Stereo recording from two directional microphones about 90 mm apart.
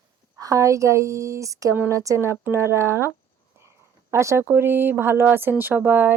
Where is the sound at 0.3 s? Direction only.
40° right (ahead or behind).